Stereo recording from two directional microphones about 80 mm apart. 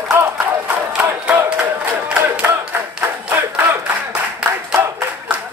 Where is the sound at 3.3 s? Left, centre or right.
Right.